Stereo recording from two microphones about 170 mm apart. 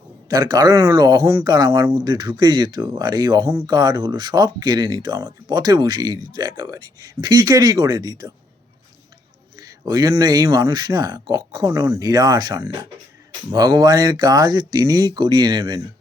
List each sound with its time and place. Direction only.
0.3 s speech: 25° right (ahead or behind)
9.6 s speech: 25° right (ahead or behind)